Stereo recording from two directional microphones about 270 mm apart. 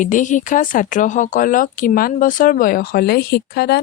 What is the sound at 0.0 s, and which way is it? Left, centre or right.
Speech, left.